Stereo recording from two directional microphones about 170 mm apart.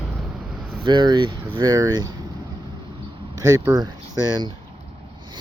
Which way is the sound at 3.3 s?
20° right (ahead or behind).